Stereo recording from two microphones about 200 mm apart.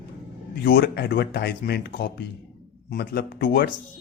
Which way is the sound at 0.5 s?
50° left (ahead or behind).